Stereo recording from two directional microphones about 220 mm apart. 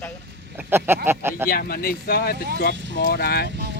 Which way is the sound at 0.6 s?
10° right (ahead or behind).